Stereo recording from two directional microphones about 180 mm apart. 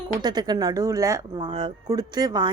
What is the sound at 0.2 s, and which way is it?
A woman's voice, 25° right (ahead or behind).